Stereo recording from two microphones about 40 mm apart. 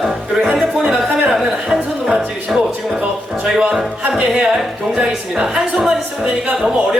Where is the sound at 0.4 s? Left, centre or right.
Centre.